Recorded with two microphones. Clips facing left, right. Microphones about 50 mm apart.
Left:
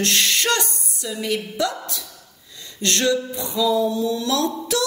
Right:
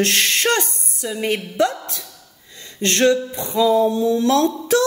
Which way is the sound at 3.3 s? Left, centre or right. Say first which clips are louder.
Right 4 dB; right.